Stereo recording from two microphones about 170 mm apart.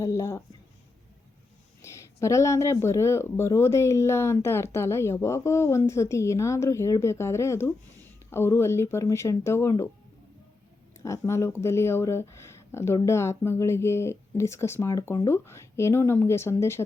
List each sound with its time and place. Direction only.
0.0 s speech: 15° left (ahead or behind)
1.8 s speech: 15° left (ahead or behind)
11.0 s speech: 15° left (ahead or behind)